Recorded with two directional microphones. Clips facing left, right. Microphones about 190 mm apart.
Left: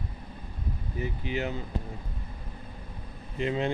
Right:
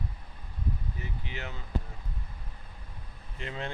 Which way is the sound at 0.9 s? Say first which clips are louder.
Left 9 dB; 15° left (ahead or behind).